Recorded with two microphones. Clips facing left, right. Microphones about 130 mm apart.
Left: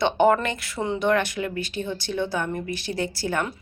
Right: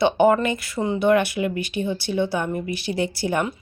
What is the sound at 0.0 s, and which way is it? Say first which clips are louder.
Speech: right 2 dB; 5° right (ahead or behind).